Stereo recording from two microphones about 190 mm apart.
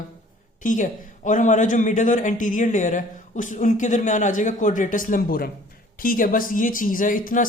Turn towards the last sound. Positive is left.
turn(degrees=45)  # may be behind; listen again after turning